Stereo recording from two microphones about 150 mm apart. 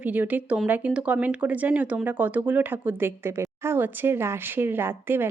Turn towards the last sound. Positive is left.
turn(degrees=-15)  # may be behind; listen again after turning